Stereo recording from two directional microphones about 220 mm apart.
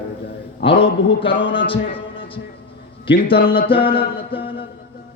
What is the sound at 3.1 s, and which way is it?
A man's voice, 25° left (ahead or behind).